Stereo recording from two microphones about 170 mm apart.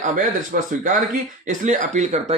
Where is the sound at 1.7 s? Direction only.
45° right (ahead or behind).